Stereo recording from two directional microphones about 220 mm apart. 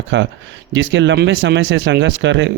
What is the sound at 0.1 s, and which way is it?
Speech, 60° right (ahead or behind).